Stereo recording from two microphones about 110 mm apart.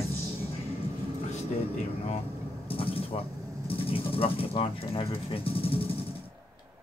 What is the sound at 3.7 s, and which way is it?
Speech, 60° left (ahead or behind).